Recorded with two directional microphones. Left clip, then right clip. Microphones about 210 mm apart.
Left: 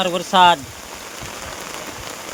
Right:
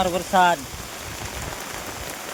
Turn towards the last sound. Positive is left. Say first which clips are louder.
# left 5 dB
turn(degrees=30)  # may be behind; listen again after turning